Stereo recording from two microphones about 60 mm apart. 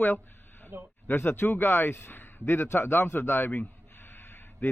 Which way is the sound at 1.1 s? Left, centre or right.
Left.